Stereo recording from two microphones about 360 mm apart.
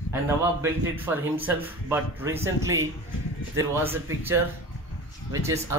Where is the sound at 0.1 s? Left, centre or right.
Centre.